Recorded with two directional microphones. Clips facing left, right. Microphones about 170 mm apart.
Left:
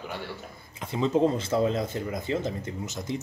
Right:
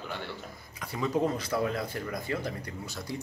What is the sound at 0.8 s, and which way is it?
Speech, 25° left (ahead or behind).